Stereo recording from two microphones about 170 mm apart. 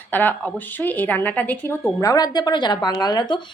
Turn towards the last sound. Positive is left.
turn(degrees=25)  # may be behind; listen again after turning